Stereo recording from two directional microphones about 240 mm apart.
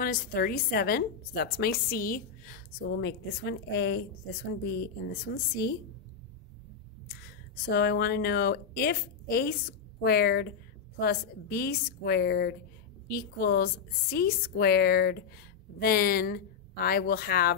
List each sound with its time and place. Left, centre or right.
0.0 s a woman's voice: left
7.6 s a woman's voice: left